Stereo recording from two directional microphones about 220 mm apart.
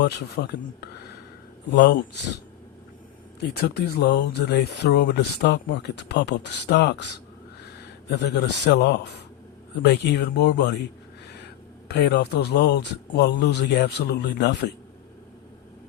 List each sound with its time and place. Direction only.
0.0 s speech: 50° left (ahead or behind)
3.6 s speech: 50° left (ahead or behind)
8.1 s speech: 50° left (ahead or behind)
11.9 s speech: 50° left (ahead or behind)